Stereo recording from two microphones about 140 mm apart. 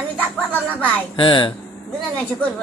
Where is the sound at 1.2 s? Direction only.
35° left (ahead or behind).